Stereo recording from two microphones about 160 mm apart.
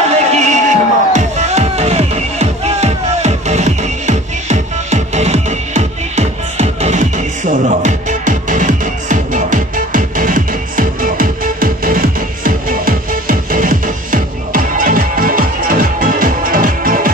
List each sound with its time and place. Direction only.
0.1 s music: 45° right (ahead or behind)